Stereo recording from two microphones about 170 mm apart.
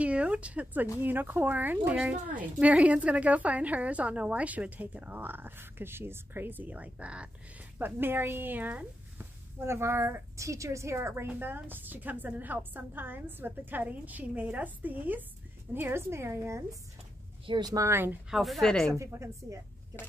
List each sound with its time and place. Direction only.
0.0 s speech: 5° right (ahead or behind)
18.3 s a woman's voice: centre (ahead or behind)
18.9 s speech: 15° right (ahead or behind)